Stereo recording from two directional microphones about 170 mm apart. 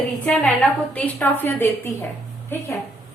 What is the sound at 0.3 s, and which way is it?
A woman's voice, 5° left (ahead or behind).